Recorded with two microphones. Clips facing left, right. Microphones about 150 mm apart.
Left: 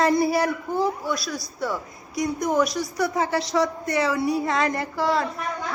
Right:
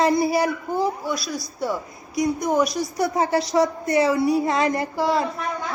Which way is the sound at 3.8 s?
25° right (ahead or behind).